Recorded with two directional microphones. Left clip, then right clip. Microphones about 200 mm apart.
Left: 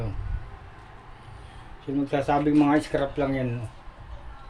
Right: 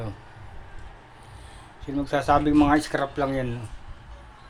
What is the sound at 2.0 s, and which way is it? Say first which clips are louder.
Speech: right 3 dB; 5° left (ahead or behind).